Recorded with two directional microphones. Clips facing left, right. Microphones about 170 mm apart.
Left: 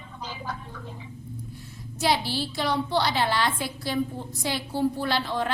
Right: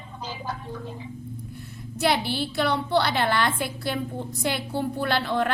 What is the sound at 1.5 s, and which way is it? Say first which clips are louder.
A woman's voice: right 3 dB; 60° right (ahead or behind).